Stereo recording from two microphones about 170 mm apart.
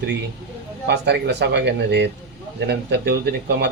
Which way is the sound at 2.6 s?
70° right (ahead or behind).